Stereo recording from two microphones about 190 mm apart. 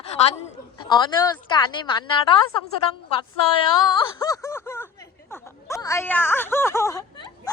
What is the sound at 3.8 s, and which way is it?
Wail, 20° left (ahead or behind).